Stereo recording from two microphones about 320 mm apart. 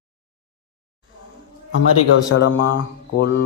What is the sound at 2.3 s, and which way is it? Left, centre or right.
Speech, left.